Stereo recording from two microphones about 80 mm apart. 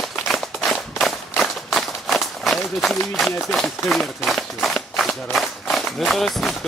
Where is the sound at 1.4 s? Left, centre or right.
Centre.